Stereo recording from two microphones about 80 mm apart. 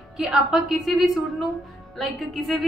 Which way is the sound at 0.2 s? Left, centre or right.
Centre.